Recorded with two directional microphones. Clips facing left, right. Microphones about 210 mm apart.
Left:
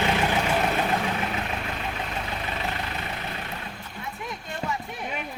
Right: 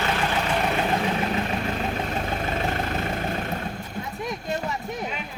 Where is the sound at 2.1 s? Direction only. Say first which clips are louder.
Right 5 dB; 45° right (ahead or behind).